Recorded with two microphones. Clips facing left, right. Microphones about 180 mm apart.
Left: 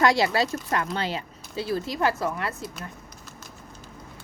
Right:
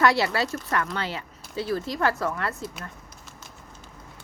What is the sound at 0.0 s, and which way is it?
A woman's voice, 15° left (ahead or behind).